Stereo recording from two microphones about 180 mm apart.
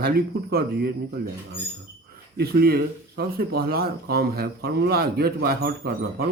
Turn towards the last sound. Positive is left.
turn(degrees=-60)  # may be behind; listen again after turning